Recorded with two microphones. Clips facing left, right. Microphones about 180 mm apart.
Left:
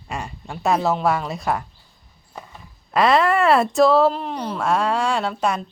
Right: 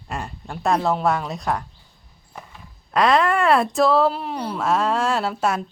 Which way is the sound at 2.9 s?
Centre (ahead or behind).